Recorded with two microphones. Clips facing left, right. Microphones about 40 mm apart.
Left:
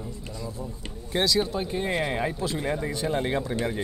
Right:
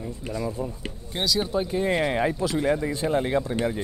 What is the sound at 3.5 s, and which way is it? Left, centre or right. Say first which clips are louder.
Speech: right 2 dB; centre.